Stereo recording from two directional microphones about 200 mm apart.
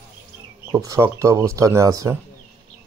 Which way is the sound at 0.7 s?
15° right (ahead or behind).